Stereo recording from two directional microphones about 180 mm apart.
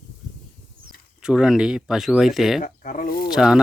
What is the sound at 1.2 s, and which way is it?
Speech, 5° right (ahead or behind).